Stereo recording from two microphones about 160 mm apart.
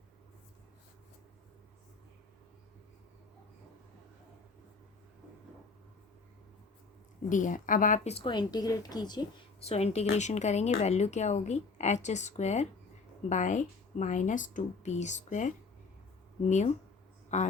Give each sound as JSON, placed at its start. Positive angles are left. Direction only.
{"t": 7.3, "sound": "a woman's voice", "side_deg": 55}
{"t": 9.6, "sound": "a woman's voice", "side_deg": 40}